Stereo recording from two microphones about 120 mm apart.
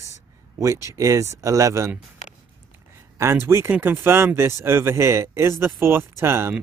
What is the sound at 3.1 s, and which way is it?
Speech, 20° right (ahead or behind).